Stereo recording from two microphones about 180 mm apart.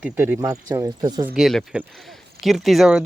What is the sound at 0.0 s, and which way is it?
Speech, 10° right (ahead or behind).